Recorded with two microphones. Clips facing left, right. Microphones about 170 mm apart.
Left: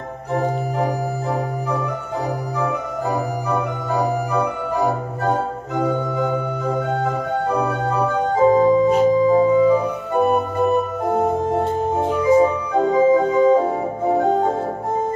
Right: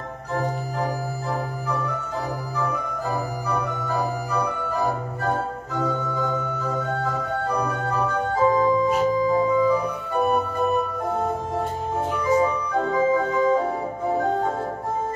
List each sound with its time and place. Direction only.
0.3 s organ: 20° left (ahead or behind)
3.5 s organ: 20° left (ahead or behind)